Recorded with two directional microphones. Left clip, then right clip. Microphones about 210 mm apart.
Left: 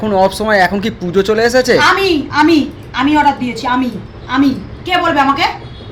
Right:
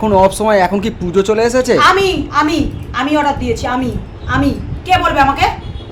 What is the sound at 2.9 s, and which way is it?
Speech, 20° right (ahead or behind).